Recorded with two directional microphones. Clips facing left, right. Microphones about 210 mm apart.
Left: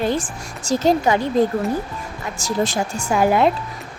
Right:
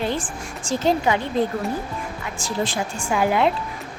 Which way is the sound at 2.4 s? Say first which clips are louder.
Left 4 dB; 40° left (ahead or behind).